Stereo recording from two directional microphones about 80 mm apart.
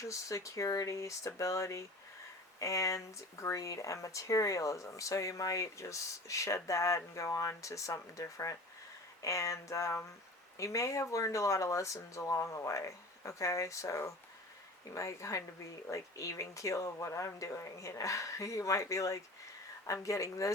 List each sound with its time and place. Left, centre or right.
0.0 s speech: left